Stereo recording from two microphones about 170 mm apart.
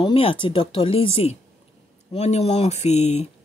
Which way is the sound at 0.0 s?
30° left (ahead or behind).